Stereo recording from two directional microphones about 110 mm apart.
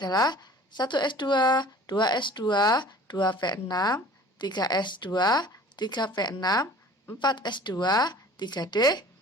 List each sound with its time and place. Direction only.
0.0 s speech: 40° left (ahead or behind)